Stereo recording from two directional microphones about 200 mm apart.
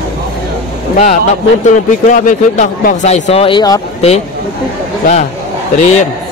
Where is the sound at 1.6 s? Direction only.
40° left (ahead or behind); by 3.8 s 20° left (ahead or behind).